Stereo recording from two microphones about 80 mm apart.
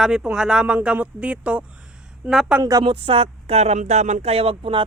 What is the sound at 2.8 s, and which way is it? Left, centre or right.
Speech, right.